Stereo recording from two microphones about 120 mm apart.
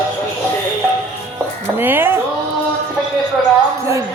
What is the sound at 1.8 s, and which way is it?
Speech, 20° right (ahead or behind).